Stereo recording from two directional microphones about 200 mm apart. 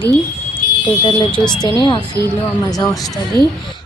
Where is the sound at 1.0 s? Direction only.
25° left (ahead or behind).